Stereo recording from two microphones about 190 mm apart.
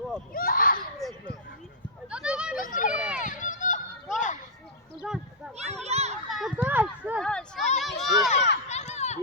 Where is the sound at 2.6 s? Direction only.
45° left (ahead or behind).